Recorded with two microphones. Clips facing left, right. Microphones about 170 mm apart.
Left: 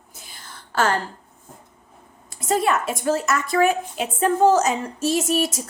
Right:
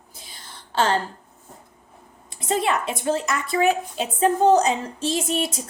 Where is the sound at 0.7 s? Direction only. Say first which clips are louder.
Even; 30° right (ahead or behind).